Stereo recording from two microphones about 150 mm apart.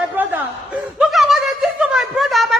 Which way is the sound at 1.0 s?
Centre (ahead or behind).